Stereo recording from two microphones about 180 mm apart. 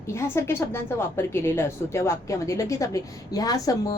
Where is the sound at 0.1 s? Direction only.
15° left (ahead or behind).